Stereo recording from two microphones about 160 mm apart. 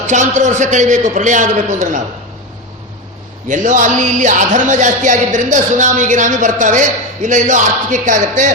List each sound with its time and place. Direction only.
0.1 s speech: 50° right (ahead or behind)
3.5 s speech: 50° right (ahead or behind)